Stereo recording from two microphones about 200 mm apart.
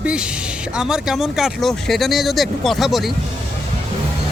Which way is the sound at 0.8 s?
5° right (ahead or behind).